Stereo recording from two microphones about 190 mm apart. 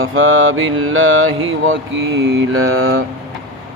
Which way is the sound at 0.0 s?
90° right.